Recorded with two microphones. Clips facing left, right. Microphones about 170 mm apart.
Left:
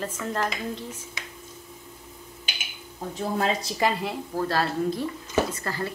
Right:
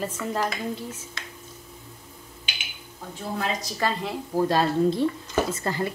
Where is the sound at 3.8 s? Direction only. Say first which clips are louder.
Left 1 dB; 15° left (ahead or behind).